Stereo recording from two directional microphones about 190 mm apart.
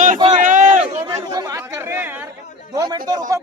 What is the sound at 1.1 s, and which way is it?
Speech, 20° right (ahead or behind).